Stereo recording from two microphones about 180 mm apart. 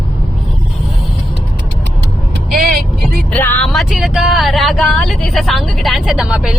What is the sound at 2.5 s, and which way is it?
Vehicle, 60° right (ahead or behind).